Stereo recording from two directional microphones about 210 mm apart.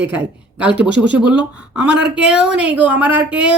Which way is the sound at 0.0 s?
5° right (ahead or behind).